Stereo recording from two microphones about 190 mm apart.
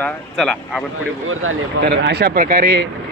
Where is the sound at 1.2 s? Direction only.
90° right; by 2.9 s 55° right (ahead or behind).